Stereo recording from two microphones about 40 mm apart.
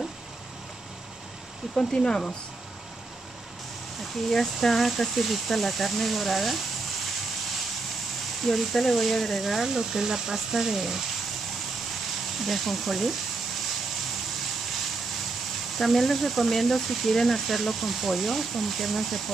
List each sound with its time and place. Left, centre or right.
1.8 s speech: centre
4.3 s speech: centre
8.5 s speech: centre
9.4 s speech: centre
12.4 s speech: centre
15.8 s speech: centre